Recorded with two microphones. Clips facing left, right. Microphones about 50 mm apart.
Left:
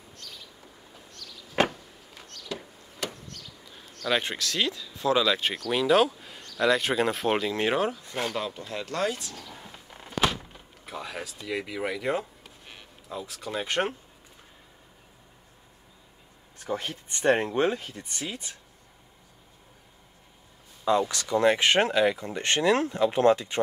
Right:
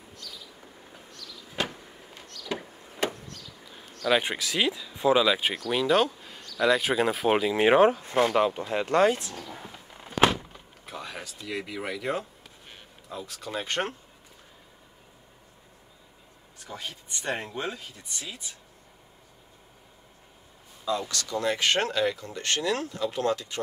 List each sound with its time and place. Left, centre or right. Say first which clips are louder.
0.1 s vehicle: right 1 dB; left
2.5 s a sound: right 4 dB; right
4.1 s speech: right 2 dB; centre
5.7 s speech: left 2 dB; centre
7.6 s speech: right 7 dB; right
9.7 s a sound: even; centre
13.1 s speech: left 1 dB; centre
16.6 s speech: left 7 dB; left
21.0 s speech: left 6 dB; left